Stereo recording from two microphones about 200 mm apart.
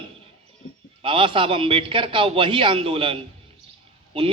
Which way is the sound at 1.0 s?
25° right (ahead or behind).